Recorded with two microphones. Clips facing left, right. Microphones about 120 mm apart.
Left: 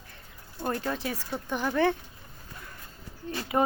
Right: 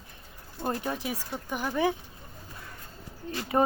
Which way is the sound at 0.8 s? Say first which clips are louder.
Left 1 dB; 15° right (ahead or behind).